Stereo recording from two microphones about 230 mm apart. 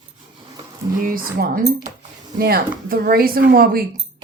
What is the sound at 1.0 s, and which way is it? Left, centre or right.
Speech, right.